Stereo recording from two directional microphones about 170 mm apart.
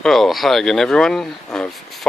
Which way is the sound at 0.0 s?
Centre (ahead or behind).